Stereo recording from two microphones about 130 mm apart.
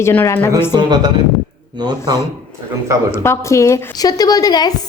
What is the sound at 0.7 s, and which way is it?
Speech, 35° right (ahead or behind).